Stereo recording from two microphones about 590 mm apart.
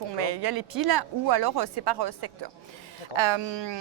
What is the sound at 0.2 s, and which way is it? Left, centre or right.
Speech, right.